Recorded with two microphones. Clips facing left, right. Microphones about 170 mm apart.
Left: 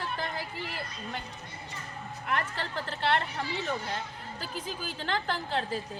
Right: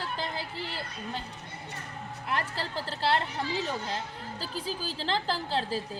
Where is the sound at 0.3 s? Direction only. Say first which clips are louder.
Right 1 dB; 30° right (ahead or behind).